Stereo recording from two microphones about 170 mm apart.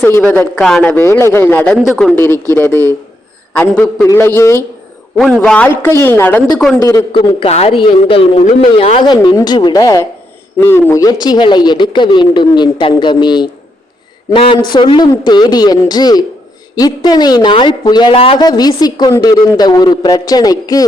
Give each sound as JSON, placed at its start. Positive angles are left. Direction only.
{"t": 0.0, "sound": "a man's voice", "side_deg": 10}
{"t": 2.1, "sound": "a man's voice", "side_deg": 15}
{"t": 5.1, "sound": "a man's voice", "side_deg": 0}
{"t": 7.1, "sound": "a man's voice", "side_deg": 30}